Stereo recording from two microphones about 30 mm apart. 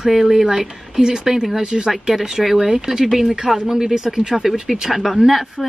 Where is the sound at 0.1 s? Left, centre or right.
Centre.